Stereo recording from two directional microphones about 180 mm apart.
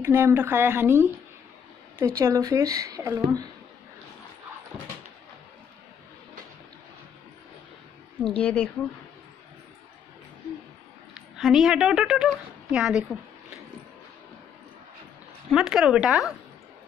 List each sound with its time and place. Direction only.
0.0 s a woman's voice: 15° right (ahead or behind)
8.4 s speech: 5° left (ahead or behind)
11.1 s a woman's voice: centre (ahead or behind)
15.5 s a woman's voice: 5° right (ahead or behind)